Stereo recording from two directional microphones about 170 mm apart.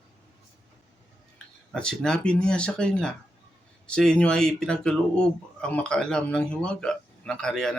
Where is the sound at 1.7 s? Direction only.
5° left (ahead or behind).